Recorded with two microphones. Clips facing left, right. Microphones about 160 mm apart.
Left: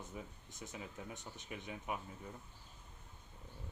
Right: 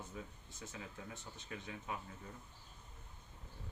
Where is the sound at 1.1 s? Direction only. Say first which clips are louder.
Left 1 dB; 15° left (ahead or behind).